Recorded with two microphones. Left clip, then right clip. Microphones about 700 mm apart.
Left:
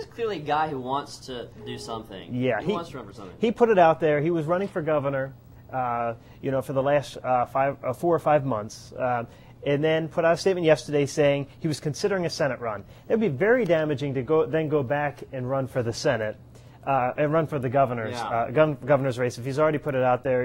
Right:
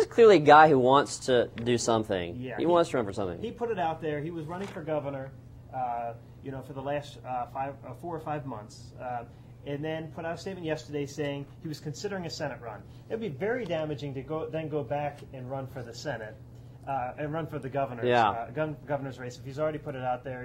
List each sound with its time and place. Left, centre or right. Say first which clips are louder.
0.0 s speech: right 11 dB; right
3.3 s speech: left 18 dB; left
9.7 s speech: left 12 dB; left